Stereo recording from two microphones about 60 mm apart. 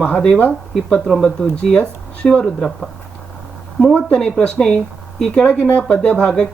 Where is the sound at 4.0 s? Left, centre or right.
Centre.